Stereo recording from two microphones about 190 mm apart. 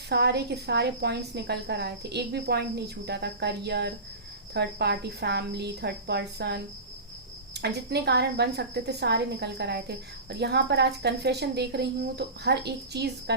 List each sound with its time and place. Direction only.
0.1 s a woman's voice: 60° right (ahead or behind)